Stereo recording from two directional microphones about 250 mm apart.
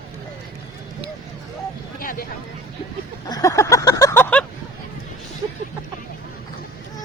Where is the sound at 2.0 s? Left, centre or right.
Left.